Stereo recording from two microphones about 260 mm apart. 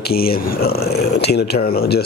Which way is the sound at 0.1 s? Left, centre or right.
Left.